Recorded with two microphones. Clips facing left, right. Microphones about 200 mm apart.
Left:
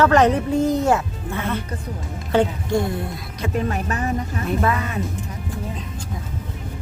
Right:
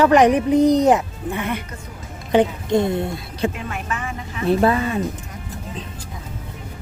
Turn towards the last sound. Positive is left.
turn(degrees=-30)  # may be behind; listen again after turning